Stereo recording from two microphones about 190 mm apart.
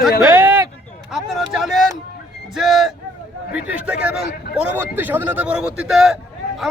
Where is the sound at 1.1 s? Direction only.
Centre (ahead or behind).